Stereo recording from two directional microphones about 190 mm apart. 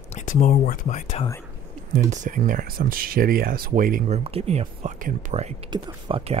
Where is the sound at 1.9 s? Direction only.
40° right (ahead or behind).